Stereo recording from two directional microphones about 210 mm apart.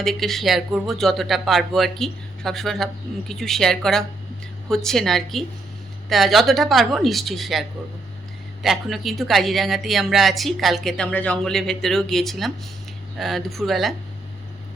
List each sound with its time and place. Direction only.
0.0 s speech: centre (ahead or behind)
8.6 s speech: centre (ahead or behind)